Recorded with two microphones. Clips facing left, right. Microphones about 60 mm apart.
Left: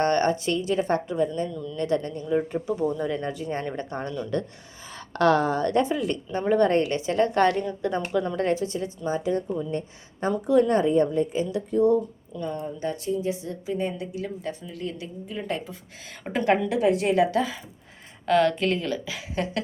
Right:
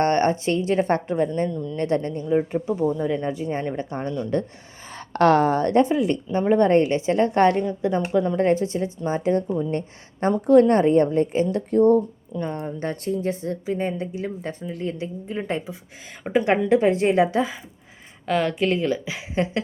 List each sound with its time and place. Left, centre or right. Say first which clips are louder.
0.0 s a woman's voice: right 2 dB; right
2.3 s a woman's voice: right 3 dB; right
4.9 s speech: right 3 dB; right
5.9 s a woman's voice: right 5 dB; right
9.7 s a woman's voice: right 3 dB; right
16.2 s a woman's voice: right 3 dB; centre
16.6 s a woman's voice: right 4 dB; right
18.3 s a woman's voice: even; centre